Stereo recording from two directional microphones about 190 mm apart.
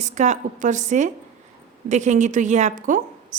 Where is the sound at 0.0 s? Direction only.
40° right (ahead or behind).